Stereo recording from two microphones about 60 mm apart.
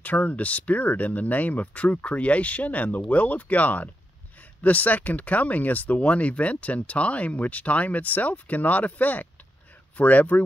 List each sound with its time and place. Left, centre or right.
0.0 s speech: left